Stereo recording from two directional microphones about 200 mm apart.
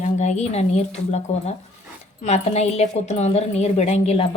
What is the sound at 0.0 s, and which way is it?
A woman's voice, 35° left (ahead or behind).